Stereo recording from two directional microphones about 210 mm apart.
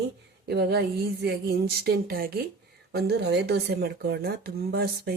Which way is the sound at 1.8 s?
45° right (ahead or behind).